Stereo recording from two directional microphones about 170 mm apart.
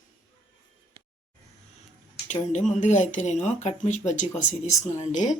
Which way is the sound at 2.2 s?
45° left (ahead or behind).